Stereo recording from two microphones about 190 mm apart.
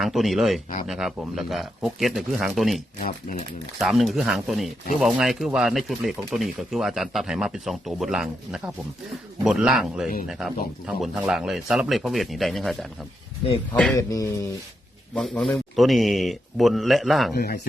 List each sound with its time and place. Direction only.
0.0 s speech: centre (ahead or behind)
3.0 s speech: 45° left (ahead or behind)
3.8 s speech: centre (ahead or behind)
13.9 s speech: 15° left (ahead or behind)
15.1 s speech: 5° left (ahead or behind)
17.3 s speech: 55° left (ahead or behind)